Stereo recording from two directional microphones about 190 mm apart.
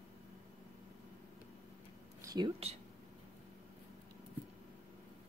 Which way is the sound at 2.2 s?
25° right (ahead or behind).